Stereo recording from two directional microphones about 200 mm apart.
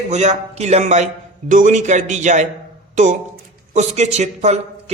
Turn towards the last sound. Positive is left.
turn(degrees=-35)  # may be behind; listen again after turning